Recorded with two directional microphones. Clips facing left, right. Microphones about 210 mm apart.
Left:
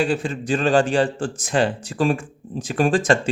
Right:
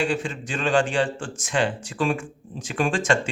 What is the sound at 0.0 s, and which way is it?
Speech, 35° left (ahead or behind).